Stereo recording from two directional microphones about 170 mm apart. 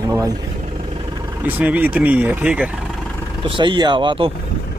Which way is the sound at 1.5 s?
10° right (ahead or behind).